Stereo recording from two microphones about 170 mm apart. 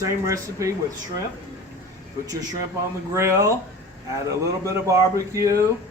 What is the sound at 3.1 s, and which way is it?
Speech, 15° right (ahead or behind).